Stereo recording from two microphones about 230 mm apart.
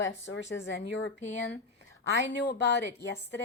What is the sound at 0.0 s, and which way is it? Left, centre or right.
A woman's voice, left.